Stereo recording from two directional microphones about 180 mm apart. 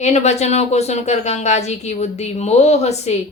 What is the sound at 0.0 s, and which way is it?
A woman's voice, 40° left (ahead or behind).